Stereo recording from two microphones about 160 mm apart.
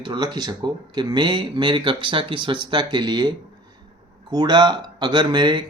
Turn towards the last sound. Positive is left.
turn(degrees=-30)  # may be behind; listen again after turning